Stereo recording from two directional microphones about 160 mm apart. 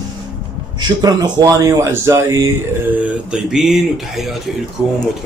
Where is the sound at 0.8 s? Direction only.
25° right (ahead or behind); by 4.3 s centre (ahead or behind).